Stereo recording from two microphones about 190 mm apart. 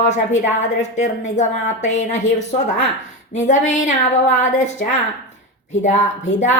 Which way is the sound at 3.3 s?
40° left (ahead or behind).